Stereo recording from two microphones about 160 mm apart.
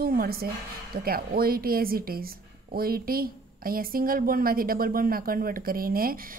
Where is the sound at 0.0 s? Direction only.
65° right (ahead or behind).